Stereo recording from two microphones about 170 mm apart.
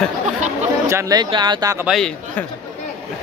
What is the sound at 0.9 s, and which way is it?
Speech, 20° right (ahead or behind).